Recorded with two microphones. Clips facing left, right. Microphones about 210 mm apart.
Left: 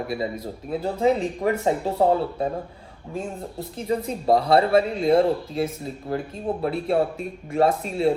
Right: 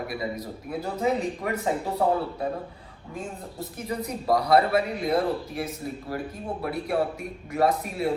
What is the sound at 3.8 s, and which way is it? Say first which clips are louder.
A man's voice: left 6 dB; 25° left (ahead or behind).